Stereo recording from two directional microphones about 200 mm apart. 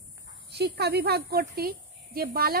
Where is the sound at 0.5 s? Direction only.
55° right (ahead or behind).